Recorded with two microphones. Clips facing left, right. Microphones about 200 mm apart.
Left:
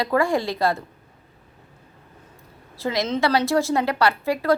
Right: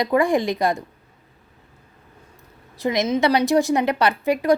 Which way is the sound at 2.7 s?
20° right (ahead or behind).